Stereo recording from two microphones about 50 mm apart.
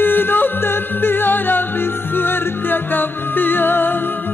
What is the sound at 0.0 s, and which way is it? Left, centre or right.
Music, left.